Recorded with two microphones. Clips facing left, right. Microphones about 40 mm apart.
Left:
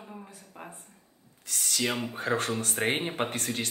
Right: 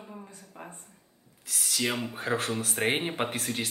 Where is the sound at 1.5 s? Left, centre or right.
Centre.